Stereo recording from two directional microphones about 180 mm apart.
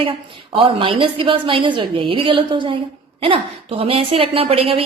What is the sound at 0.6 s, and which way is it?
A woman's voice, 30° right (ahead or behind).